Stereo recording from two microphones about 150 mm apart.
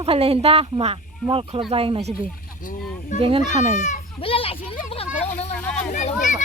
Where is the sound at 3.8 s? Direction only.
55° left (ahead or behind).